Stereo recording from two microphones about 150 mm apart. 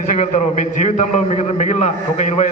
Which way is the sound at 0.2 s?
55° left (ahead or behind).